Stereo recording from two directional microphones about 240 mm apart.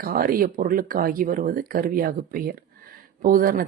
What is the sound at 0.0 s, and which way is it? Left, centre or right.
Speech, right.